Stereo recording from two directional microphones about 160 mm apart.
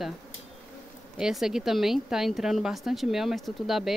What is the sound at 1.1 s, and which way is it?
Speech, 5° right (ahead or behind).